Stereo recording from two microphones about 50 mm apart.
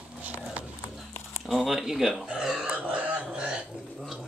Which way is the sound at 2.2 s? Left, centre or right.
Centre.